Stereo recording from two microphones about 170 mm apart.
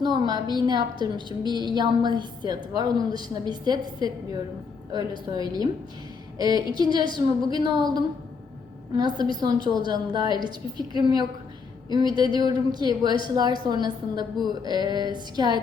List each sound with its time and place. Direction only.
0.0 s a woman's voice: 25° right (ahead or behind)